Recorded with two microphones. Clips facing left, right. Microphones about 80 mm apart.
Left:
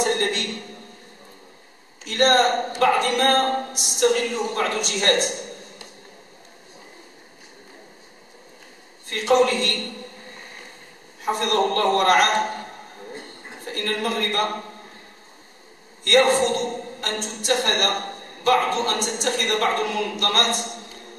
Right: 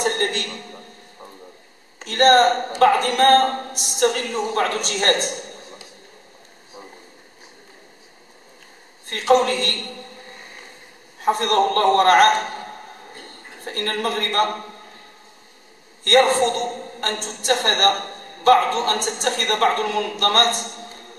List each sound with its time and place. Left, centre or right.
0.0 s a sound: right
2.0 s a man's voice: right
9.1 s a man's voice: right
11.2 s a man's voice: right
13.7 s a man's voice: right
16.0 s a man's voice: right